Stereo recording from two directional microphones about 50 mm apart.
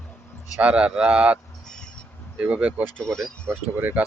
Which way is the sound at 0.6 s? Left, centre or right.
Right.